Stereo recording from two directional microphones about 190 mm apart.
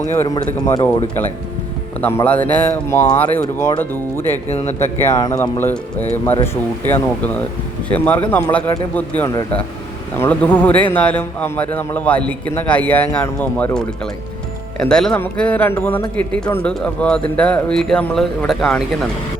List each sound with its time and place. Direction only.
0.1 s a man's voice: 10° left (ahead or behind)
2.0 s a man's voice: 10° left (ahead or behind)
4.4 s speech: 35° left (ahead or behind)
4.8 s a man's voice: 10° left (ahead or behind)